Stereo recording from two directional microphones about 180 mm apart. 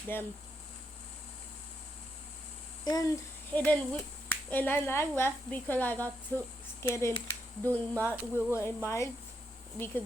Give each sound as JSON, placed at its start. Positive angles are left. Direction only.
{"t": 0.1, "sound": "speech", "side_deg": 10}
{"t": 2.8, "sound": "speech", "side_deg": 20}
{"t": 3.5, "sound": "speech", "side_deg": 10}
{"t": 7.9, "sound": "speech", "side_deg": -10}
{"t": 8.5, "sound": "speech", "side_deg": 15}